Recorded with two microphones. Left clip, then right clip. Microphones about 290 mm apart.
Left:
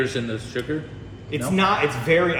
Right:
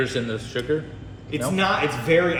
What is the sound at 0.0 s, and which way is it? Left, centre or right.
Speech, centre.